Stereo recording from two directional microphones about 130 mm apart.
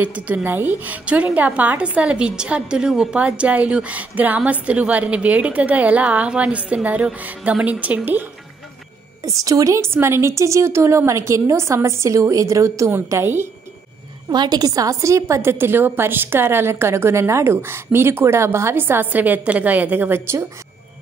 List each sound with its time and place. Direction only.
0.0 s a woman's voice: 10° right (ahead or behind)
9.2 s a woman's voice: 25° right (ahead or behind)
14.3 s a woman's voice: 30° right (ahead or behind); by 20.2 s 15° right (ahead or behind)